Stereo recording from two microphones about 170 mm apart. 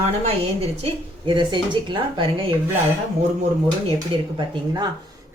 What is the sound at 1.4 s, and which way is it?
Speech, 25° right (ahead or behind).